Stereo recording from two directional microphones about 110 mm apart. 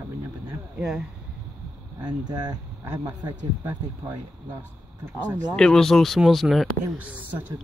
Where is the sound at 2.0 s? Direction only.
40° right (ahead or behind).